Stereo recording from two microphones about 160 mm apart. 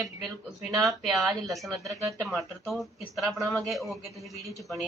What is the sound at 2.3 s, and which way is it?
A woman's voice, centre (ahead or behind).